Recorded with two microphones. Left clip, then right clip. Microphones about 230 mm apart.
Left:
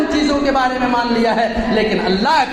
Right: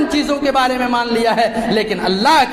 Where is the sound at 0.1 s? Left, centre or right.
Right.